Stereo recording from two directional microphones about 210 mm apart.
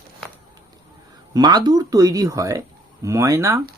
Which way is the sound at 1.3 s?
20° right (ahead or behind).